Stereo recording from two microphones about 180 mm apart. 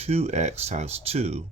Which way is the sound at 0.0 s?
35° right (ahead or behind).